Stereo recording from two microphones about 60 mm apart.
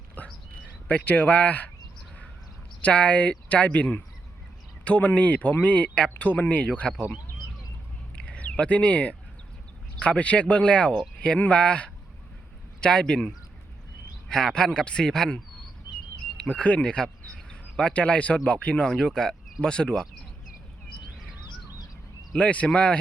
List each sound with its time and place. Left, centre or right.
0.2 s a sound: left
0.9 s speech: left
2.8 s speech: left
8.1 s a sound: left
10.0 s speech: left
16.4 s speech: centre
22.4 s speech: left